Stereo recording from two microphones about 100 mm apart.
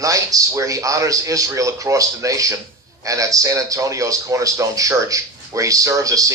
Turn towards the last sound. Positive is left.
turn(degrees=-35)  # may be behind; listen again after turning